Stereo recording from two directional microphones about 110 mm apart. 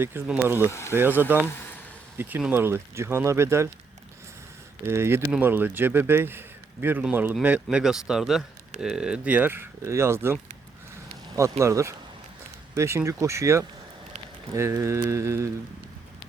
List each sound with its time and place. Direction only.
0.0 s speech: 20° right (ahead or behind)
0.7 s speech: 25° left (ahead or behind)
0.9 s a man's voice: 20° right (ahead or behind)
2.5 s speech: 20° right (ahead or behind)
4.8 s a man's voice: 20° right (ahead or behind)
11.3 s speech: 30° right (ahead or behind)